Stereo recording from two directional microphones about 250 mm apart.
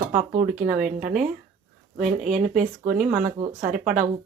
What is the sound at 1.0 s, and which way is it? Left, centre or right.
Speech, right.